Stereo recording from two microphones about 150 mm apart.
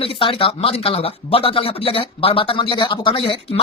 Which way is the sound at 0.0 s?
35° left (ahead or behind).